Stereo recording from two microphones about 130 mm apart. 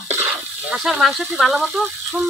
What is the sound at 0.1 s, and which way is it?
Water, 15° right (ahead or behind).